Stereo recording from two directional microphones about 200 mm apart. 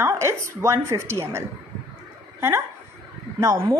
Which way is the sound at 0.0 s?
15° right (ahead or behind).